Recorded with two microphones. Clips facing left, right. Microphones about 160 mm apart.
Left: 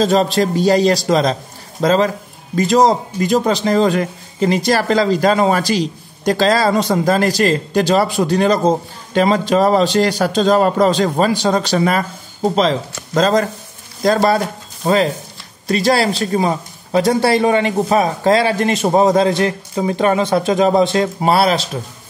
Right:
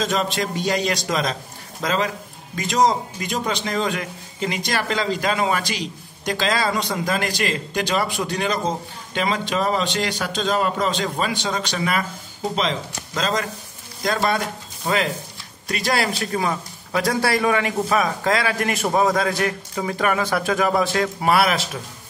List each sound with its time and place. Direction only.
0.0 s a man's voice: 35° left (ahead or behind)
15.6 s a man's voice: 30° left (ahead or behind)